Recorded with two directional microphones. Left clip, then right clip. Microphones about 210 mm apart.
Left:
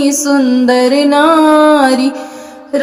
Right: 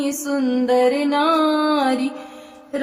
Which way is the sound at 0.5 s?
45° left (ahead or behind).